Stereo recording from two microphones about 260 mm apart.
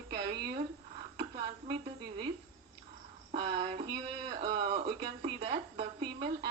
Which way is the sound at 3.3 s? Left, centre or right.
Centre.